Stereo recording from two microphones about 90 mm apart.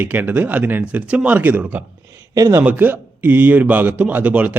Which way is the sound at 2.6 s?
20° right (ahead or behind).